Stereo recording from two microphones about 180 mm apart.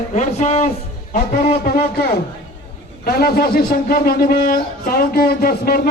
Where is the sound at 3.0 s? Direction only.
60° left (ahead or behind).